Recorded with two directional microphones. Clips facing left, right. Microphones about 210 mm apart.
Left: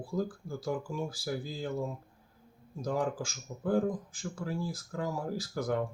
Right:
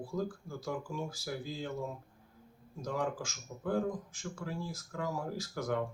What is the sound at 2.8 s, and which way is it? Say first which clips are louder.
A man's voice: left 3 dB; 30° left (ahead or behind).